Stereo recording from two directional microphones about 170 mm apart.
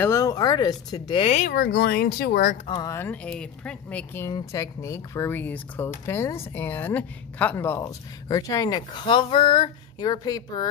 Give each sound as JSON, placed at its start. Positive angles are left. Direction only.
{"t": 0.0, "sound": "speech", "side_deg": 20}
{"t": 1.5, "sound": "speech", "side_deg": 65}
{"t": 2.6, "sound": "speech", "side_deg": 30}
{"t": 2.9, "sound": "speech", "side_deg": 10}